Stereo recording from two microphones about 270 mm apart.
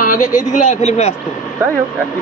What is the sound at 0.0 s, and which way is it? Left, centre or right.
Speech, left.